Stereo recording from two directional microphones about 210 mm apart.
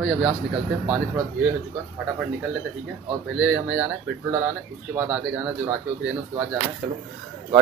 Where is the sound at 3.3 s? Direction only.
5° right (ahead or behind).